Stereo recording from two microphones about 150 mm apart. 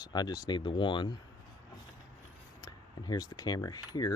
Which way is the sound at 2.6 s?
25° left (ahead or behind).